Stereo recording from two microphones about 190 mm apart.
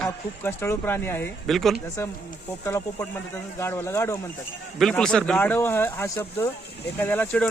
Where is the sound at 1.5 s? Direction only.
Centre (ahead or behind).